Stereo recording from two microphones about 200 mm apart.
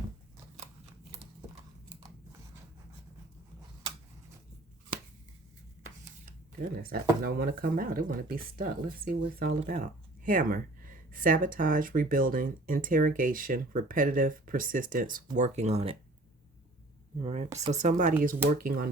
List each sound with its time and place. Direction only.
6.6 s speech: 50° right (ahead or behind); by 16.0 s 30° right (ahead or behind)
17.2 s speech: 30° right (ahead or behind); by 18.9 s 45° right (ahead or behind)